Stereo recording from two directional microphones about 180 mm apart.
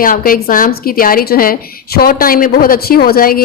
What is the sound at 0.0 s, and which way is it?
A woman's voice, 50° left (ahead or behind).